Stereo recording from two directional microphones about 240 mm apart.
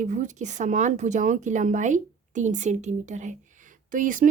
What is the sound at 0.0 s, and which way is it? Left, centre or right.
Speech, right.